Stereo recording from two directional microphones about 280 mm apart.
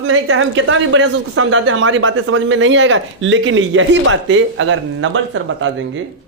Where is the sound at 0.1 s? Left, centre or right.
Right.